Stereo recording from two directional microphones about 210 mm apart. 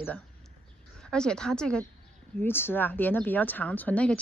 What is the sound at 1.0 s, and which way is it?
A woman's voice, 5° left (ahead or behind).